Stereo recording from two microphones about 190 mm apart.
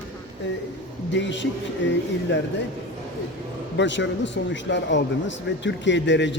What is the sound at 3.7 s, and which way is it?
A man's voice, 70° left (ahead or behind).